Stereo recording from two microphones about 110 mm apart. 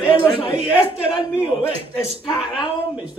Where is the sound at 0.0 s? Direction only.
50° left (ahead or behind).